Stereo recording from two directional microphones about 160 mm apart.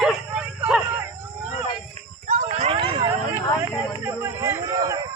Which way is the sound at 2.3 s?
40° right (ahead or behind).